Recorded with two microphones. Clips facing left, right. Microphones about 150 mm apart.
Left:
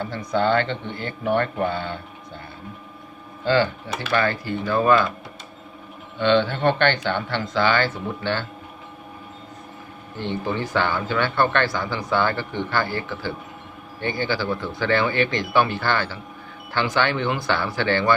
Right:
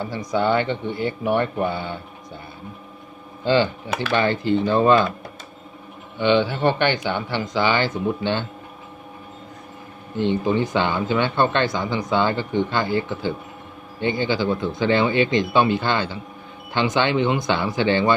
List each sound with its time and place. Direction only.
0.0 s speech: 15° right (ahead or behind)
3.4 s speech: 20° right (ahead or behind)
6.1 s speech: 15° right (ahead or behind)
10.2 s speech: 15° right (ahead or behind)